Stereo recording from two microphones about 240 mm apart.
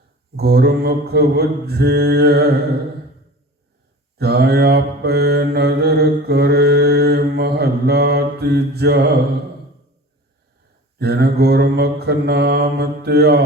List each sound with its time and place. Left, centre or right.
0.3 s mantra: right
4.2 s mantra: right
11.0 s mantra: right